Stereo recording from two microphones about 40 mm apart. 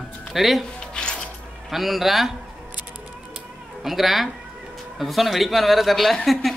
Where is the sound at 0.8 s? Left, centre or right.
Left.